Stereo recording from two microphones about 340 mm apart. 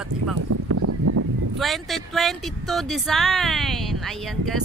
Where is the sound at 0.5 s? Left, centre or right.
Right.